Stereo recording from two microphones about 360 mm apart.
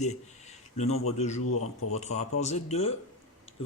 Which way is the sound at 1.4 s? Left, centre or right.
Left.